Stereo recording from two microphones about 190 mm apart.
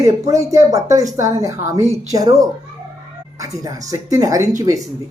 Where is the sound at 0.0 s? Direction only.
15° right (ahead or behind).